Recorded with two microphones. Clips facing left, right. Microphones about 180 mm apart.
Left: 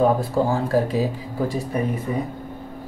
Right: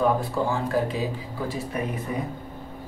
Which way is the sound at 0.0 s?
35° left (ahead or behind).